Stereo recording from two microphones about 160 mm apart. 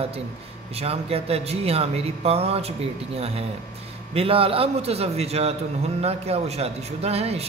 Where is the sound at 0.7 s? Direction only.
40° right (ahead or behind).